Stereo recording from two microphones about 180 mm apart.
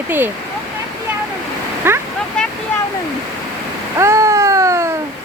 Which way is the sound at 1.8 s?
10° right (ahead or behind).